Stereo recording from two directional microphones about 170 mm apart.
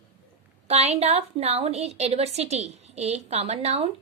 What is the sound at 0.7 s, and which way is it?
A woman's voice, 40° right (ahead or behind).